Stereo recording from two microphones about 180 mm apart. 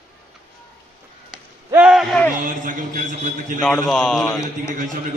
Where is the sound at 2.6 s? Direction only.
45° right (ahead or behind).